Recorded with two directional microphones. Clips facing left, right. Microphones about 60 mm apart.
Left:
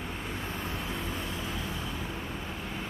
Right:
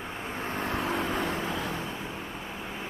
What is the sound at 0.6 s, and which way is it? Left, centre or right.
Vehicle, right.